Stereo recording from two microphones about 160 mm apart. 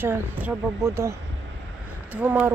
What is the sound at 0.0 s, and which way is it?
Speech, 10° right (ahead or behind).